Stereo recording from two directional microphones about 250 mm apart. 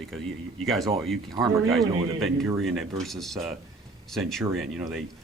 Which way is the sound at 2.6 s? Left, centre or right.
Centre.